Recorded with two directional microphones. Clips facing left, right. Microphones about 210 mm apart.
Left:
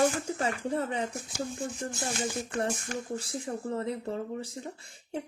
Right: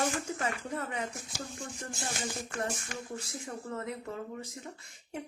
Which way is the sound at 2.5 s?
35° left (ahead or behind).